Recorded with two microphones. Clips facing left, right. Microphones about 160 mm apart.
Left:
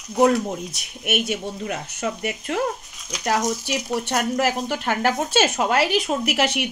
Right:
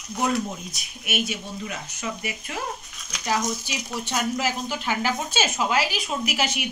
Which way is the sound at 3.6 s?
65° left (ahead or behind).